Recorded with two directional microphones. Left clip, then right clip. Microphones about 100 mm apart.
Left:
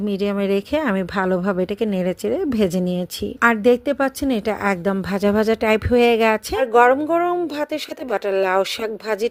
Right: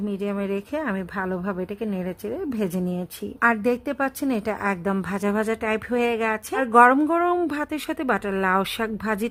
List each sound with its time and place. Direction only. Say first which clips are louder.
0.1 s speech: left 8 dB; 40° left (ahead or behind)
3.4 s speech: left 5 dB; 25° left (ahead or behind)
6.7 s speech: left 1 dB; 15° left (ahead or behind)